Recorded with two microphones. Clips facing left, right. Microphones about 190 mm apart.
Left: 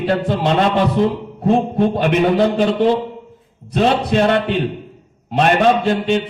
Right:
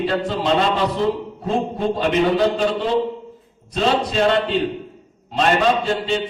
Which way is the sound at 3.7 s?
60° left (ahead or behind).